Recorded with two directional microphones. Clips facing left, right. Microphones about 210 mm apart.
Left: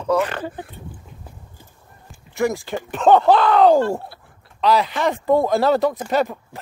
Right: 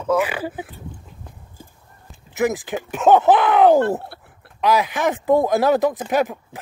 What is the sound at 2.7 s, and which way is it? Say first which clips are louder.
Speech: left 1 dB; 5° right (ahead or behind).